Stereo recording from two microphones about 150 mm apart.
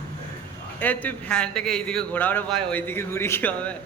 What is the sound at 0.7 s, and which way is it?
A man's voice, 10° left (ahead or behind).